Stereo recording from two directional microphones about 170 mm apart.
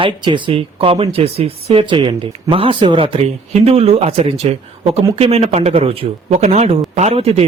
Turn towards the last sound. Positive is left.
turn(degrees=-35)  # may be behind; listen again after turning